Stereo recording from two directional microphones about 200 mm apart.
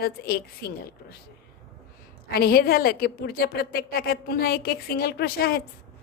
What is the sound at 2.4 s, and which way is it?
A woman's voice, 50° left (ahead or behind).